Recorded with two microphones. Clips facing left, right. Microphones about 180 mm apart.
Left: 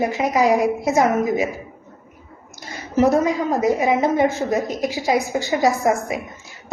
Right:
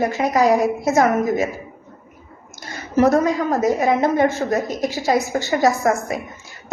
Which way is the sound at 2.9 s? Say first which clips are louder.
Right 1 dB; 20° left (ahead or behind).